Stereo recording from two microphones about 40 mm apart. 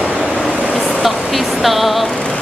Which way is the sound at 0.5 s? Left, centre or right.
Right.